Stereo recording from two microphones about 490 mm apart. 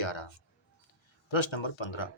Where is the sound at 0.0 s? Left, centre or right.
Left.